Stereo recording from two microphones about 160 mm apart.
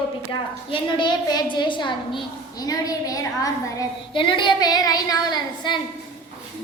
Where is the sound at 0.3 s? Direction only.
30° left (ahead or behind).